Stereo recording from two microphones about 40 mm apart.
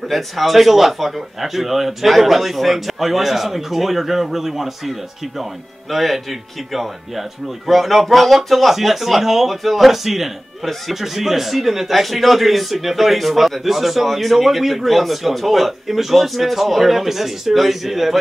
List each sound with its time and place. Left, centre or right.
0.1 s speech: centre